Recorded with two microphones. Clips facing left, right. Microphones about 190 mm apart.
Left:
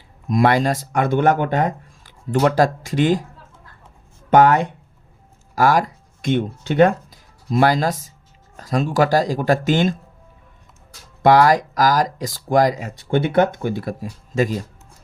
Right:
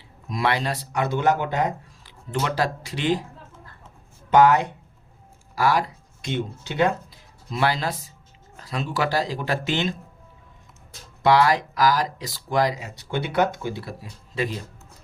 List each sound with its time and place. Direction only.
0.3 s speech: 45° left (ahead or behind)
4.3 s speech: 55° left (ahead or behind)
11.2 s speech: 45° left (ahead or behind)